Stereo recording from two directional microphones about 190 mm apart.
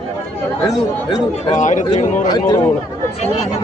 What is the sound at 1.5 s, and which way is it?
Speech, 40° left (ahead or behind).